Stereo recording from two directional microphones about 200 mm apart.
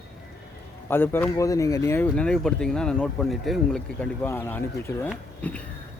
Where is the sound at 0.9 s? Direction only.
10° left (ahead or behind).